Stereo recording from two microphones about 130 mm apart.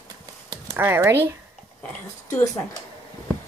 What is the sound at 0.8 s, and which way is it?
Speech, 20° right (ahead or behind).